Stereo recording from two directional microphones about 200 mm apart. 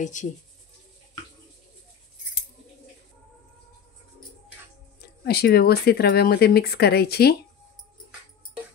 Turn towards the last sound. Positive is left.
turn(degrees=50)  # may be behind; listen again after turning